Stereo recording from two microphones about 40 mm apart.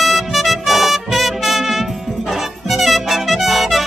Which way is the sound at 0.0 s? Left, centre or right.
Centre.